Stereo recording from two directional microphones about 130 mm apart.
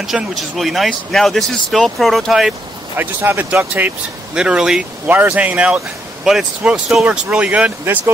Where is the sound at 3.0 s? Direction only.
15° right (ahead or behind).